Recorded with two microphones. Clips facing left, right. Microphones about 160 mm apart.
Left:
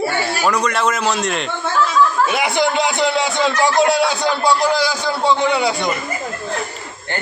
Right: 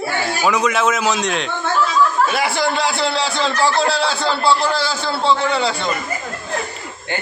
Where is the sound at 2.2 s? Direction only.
20° left (ahead or behind).